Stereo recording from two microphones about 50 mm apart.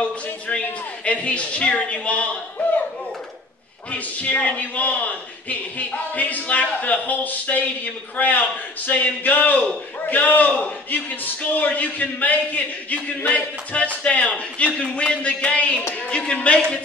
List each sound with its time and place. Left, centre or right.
0.5 s a man's voice: left
3.9 s a man's voice: left
11.5 s a man's voice: left